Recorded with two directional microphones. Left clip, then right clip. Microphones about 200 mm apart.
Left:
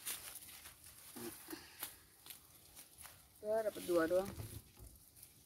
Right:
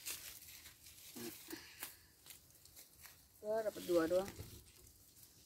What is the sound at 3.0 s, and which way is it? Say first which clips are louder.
Snake: left 2 dB; 10° left (ahead or behind).